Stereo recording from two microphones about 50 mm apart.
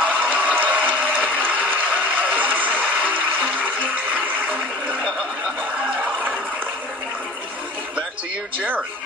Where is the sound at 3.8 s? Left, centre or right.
Right.